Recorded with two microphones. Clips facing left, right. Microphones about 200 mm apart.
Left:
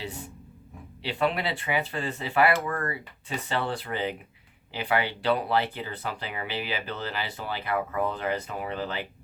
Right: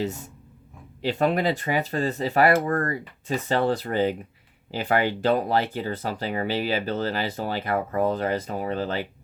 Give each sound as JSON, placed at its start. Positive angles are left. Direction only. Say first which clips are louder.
{"t": 1.0, "sound": "speech", "louder": "right 5 dB", "side_deg": -45}